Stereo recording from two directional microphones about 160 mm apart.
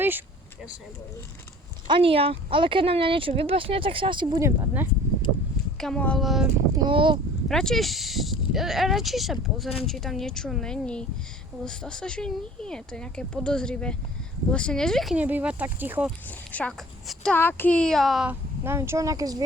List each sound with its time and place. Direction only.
1.9 s speech: 35° right (ahead or behind); by 4.9 s 15° right (ahead or behind)
5.7 s speech: 5° left (ahead or behind)
6.7 s speech: 30° right (ahead or behind)
7.4 s speech: 5° left (ahead or behind)
16.2 s a woman's voice: 10° left (ahead or behind); by 19.5 s 25° right (ahead or behind)